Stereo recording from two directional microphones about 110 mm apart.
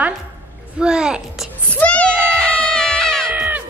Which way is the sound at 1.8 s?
10° left (ahead or behind).